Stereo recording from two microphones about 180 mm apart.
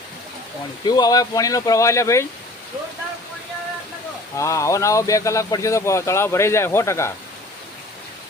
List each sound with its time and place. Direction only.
0.9 s speech: 20° left (ahead or behind)
4.4 s speech: 15° left (ahead or behind)